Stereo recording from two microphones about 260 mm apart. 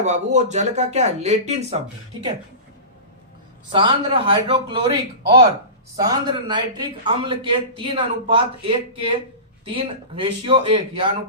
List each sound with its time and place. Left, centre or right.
0.0 s a man's voice: right
3.7 s a man's voice: centre